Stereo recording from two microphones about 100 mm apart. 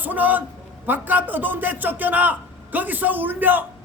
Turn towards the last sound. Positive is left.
turn(degrees=-20)  # may be behind; listen again after turning